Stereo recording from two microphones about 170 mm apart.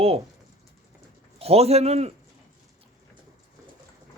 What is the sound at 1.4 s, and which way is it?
Speech, 35° right (ahead or behind).